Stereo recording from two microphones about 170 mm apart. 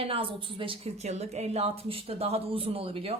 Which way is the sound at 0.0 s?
35° right (ahead or behind).